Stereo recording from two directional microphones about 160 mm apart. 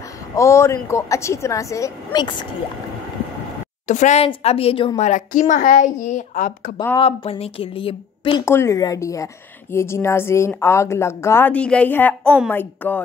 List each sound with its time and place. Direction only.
0.4 s a woman's voice: 15° left (ahead or behind)
3.8 s a woman's voice: 50° left (ahead or behind)
5.0 s a woman's voice: 50° left (ahead or behind)
7.0 s a woman's voice: 40° left (ahead or behind)
8.5 s a woman's voice: 15° left (ahead or behind)